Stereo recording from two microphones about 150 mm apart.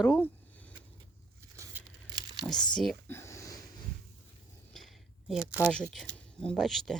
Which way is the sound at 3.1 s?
20° left (ahead or behind).